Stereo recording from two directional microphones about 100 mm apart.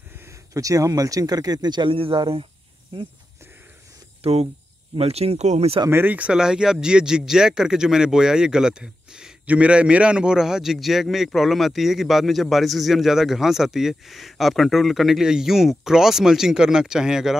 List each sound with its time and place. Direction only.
0.3 s speech: 35° right (ahead or behind); by 3.1 s 55° right (ahead or behind)
4.2 s speech: 90° right
5.9 s speech: 20° right (ahead or behind); by 17.4 s 5° right (ahead or behind)